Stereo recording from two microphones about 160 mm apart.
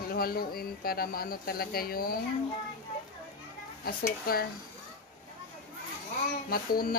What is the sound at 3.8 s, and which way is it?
Speech, 70° left (ahead or behind).